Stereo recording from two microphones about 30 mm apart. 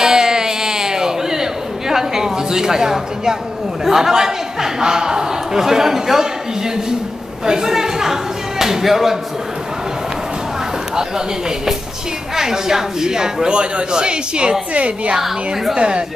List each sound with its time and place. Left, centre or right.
0.0 s a sound: right
3.8 s a man's voice: centre
7.4 s a man's voice: right
12.4 s speech: centre
13.5 s a man's voice: right
14.7 s a woman's voice: right
15.1 s a man's voice: centre
15.7 s a man's voice: right